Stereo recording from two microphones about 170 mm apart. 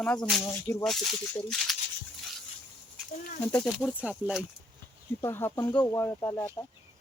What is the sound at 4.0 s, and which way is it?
Speech, 10° right (ahead or behind).